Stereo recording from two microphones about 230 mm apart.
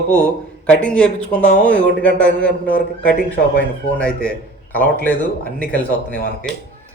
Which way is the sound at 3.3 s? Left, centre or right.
Left.